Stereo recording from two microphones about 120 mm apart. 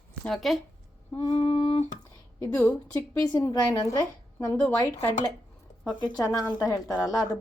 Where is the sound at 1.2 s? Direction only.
60° left (ahead or behind).